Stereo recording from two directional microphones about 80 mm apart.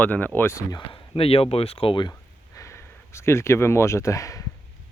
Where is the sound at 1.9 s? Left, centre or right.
Left.